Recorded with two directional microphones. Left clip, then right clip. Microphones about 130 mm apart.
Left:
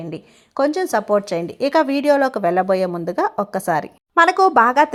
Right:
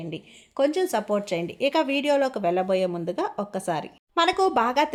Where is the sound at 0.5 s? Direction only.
35° left (ahead or behind).